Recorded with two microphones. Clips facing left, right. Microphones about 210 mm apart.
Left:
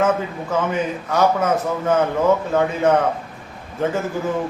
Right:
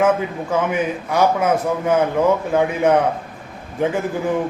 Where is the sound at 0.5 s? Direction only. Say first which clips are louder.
Right 1 dB; 10° right (ahead or behind).